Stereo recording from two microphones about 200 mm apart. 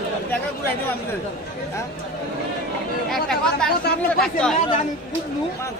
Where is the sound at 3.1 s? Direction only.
5° left (ahead or behind).